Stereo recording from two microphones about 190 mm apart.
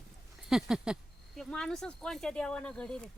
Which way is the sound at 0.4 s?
Centre (ahead or behind).